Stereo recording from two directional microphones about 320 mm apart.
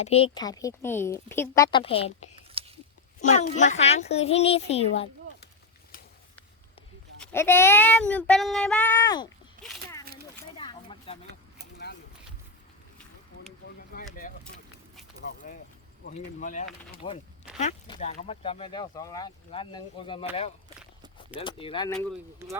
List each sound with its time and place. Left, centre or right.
0.0 s a child's voice: centre
7.2 s child singing: centre
9.6 s speech: right
10.6 s a sound: centre
13.9 s a sound: left
16.0 s a child's voice: left
21.3 s speech: centre